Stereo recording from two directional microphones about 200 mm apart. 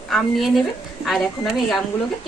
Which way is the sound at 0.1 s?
Centre (ahead or behind).